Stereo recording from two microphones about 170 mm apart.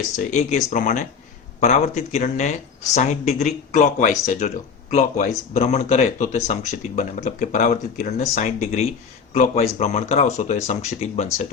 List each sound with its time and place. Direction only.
0.2 s speech: 45° left (ahead or behind)